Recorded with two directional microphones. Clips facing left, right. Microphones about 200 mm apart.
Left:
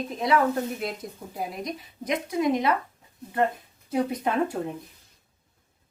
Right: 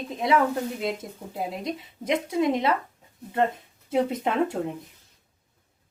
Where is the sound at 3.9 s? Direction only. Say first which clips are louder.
Right 1 dB; 25° right (ahead or behind).